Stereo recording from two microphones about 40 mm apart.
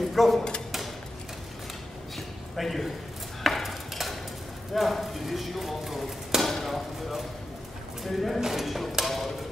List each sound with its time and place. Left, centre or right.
0.1 s a sound: centre
2.1 s a sound: centre
4.7 s speech: centre
6.4 s chop: centre
8.0 s speech: centre
9.0 s tick-tock: centre